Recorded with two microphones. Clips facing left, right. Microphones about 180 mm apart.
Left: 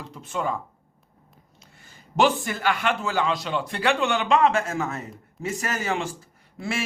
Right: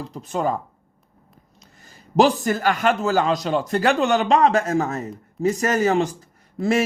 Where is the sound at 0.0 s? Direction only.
35° right (ahead or behind).